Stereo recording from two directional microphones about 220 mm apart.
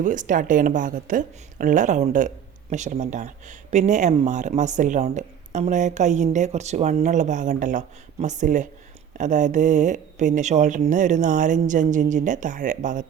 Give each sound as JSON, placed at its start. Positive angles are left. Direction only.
{"t": 0.0, "sound": "speech", "side_deg": -35}